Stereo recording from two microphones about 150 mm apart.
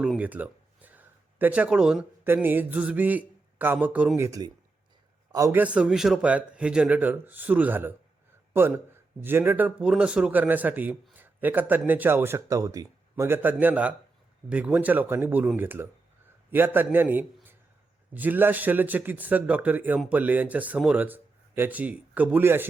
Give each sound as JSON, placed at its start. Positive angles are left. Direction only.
{"t": 0.0, "sound": "speech", "side_deg": -10}
{"t": 4.3, "sound": "a man's voice", "side_deg": -25}
{"t": 5.5, "sound": "speech", "side_deg": -10}
{"t": 11.2, "sound": "a sound", "side_deg": -10}
{"t": 11.9, "sound": "a man's voice", "side_deg": -15}